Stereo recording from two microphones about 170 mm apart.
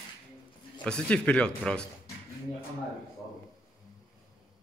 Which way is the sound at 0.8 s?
5° left (ahead or behind).